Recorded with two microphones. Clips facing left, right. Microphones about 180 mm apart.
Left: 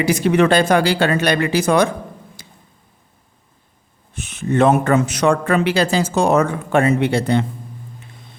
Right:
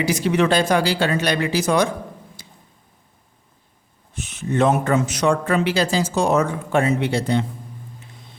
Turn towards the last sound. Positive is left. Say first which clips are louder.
# left 4 dB
turn(degrees=60)  # may be behind; listen again after turning